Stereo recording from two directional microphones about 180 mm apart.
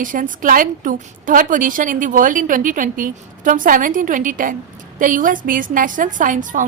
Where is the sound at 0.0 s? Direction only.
50° right (ahead or behind).